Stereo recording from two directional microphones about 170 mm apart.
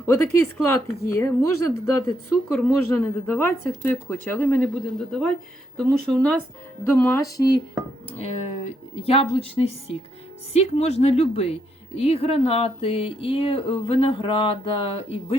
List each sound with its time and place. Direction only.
0.0 s a woman's voice: 15° left (ahead or behind)
9.0 s speech: 35° left (ahead or behind)